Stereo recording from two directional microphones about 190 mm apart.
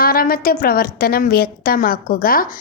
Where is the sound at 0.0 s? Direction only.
50° left (ahead or behind).